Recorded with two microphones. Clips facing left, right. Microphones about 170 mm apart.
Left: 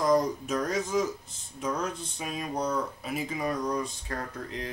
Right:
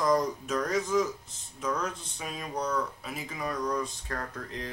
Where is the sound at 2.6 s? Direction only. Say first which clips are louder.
Even; 10° left (ahead or behind).